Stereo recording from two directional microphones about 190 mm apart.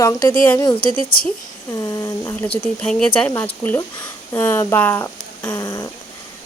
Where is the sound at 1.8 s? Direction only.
15° left (ahead or behind).